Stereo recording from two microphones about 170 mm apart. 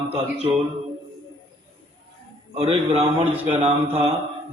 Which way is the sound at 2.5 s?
35° right (ahead or behind).